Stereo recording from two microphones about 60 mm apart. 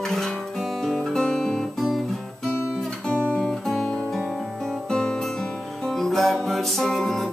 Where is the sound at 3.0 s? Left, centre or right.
Centre.